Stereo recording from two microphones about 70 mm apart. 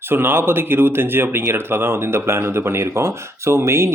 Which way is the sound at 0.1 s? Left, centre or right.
Right.